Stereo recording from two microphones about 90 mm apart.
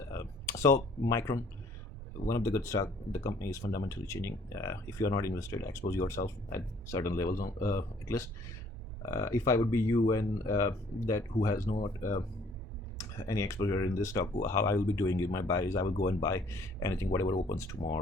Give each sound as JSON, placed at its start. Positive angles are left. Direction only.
{"t": 0.1, "sound": "a sound", "side_deg": 35}
{"t": 2.3, "sound": "speech", "side_deg": 35}
{"t": 13.1, "sound": "speech", "side_deg": 35}